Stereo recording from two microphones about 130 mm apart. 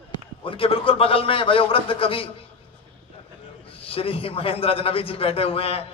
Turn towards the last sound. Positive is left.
turn(degrees=50)  # may be behind; listen again after turning